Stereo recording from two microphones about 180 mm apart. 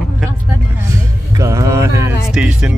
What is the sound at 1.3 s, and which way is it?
Music, 15° right (ahead or behind).